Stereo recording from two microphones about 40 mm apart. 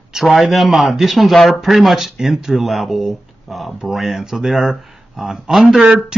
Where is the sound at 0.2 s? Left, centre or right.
Centre.